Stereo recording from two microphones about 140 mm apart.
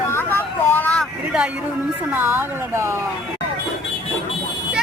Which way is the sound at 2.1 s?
15° right (ahead or behind).